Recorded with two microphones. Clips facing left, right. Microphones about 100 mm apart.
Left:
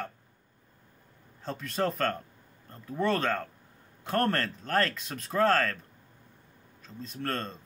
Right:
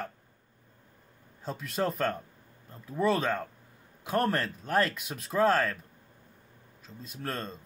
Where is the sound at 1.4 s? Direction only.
5° right (ahead or behind).